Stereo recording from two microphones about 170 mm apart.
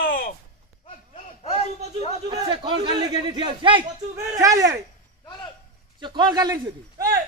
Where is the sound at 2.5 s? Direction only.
30° right (ahead or behind).